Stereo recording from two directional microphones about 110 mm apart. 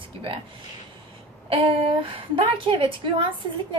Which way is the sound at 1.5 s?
55° right (ahead or behind).